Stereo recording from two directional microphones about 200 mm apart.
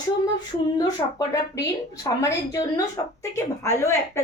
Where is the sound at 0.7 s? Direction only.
15° left (ahead or behind).